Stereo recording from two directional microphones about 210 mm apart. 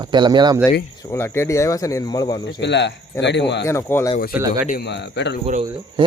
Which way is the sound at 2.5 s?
55° left (ahead or behind).